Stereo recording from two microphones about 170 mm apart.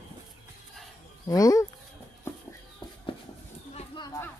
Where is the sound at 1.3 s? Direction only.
20° left (ahead or behind).